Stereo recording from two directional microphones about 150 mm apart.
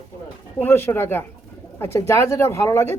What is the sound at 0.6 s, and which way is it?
Speech, 15° left (ahead or behind).